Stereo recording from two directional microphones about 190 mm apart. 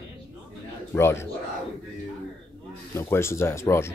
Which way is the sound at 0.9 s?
15° left (ahead or behind).